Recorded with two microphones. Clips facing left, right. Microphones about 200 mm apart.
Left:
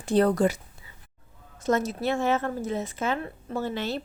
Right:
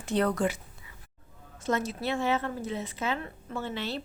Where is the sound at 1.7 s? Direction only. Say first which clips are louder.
Left 4 dB; 45° left (ahead or behind).